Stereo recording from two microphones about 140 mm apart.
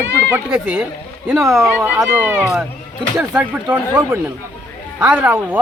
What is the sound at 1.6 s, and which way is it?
Speech, 20° right (ahead or behind).